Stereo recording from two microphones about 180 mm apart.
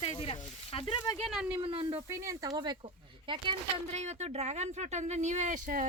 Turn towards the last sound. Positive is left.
turn(degrees=-45)  # may be behind; listen again after turning